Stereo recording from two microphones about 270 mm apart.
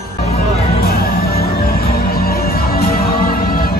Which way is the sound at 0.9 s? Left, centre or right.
Left.